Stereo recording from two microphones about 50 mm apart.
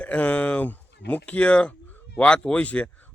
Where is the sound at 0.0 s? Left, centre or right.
Left.